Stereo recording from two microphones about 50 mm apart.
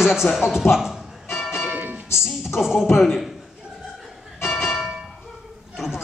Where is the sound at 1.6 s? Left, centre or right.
Right.